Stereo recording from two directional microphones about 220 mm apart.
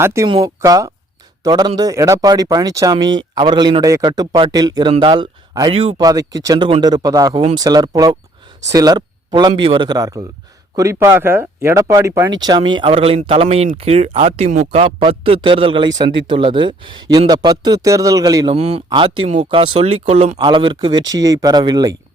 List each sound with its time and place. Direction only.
0.0 s speech: 15° right (ahead or behind)